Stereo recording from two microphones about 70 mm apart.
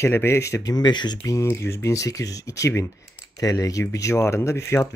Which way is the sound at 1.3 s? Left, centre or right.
Left.